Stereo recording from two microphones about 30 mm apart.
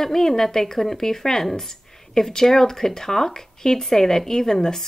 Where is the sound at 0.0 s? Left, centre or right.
Centre.